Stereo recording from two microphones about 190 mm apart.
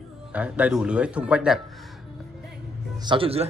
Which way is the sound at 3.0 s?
25° right (ahead or behind).